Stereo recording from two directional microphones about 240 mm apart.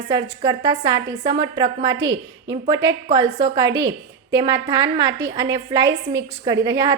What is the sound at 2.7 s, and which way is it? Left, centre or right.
A woman's voice, centre.